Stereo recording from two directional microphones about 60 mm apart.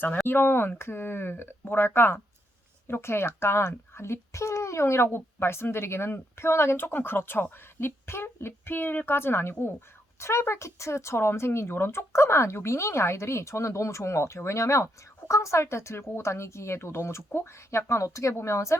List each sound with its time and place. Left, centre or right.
0.3 s a woman's voice: left